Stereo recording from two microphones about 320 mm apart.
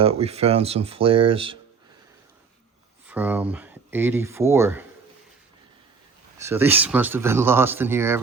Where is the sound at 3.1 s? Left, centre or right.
Centre.